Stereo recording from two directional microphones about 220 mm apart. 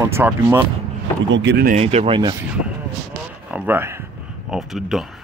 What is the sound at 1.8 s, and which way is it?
Speech, 30° right (ahead or behind).